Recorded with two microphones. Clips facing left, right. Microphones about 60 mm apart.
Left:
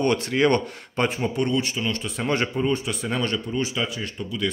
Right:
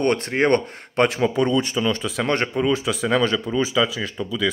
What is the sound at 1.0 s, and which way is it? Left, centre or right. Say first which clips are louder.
Speech: right 5 dB; right.